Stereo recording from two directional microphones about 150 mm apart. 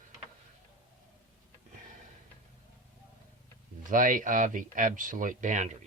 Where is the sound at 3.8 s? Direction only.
60° right (ahead or behind).